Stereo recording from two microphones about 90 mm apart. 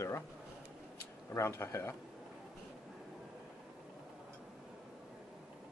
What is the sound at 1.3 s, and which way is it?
Speech, 30° left (ahead or behind).